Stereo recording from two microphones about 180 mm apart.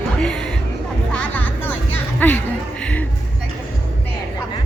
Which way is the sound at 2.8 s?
5° left (ahead or behind).